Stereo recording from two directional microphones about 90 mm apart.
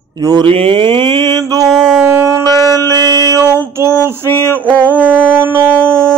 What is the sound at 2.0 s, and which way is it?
Shofar, 30° right (ahead or behind).